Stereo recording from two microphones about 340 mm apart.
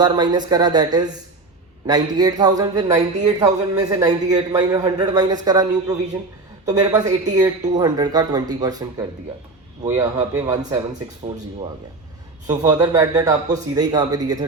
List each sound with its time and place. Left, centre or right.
0.0 s a man's voice: centre
12.5 s a man's voice: centre